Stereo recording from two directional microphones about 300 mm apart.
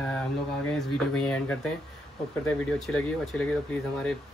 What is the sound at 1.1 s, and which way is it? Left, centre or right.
Speech, centre.